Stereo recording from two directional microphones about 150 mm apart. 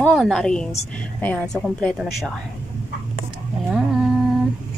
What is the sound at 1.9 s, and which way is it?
Speech, centre (ahead or behind).